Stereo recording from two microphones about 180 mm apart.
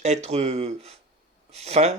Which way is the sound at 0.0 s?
35° right (ahead or behind).